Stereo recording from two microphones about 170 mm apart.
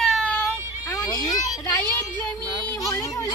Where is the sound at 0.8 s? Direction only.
20° left (ahead or behind).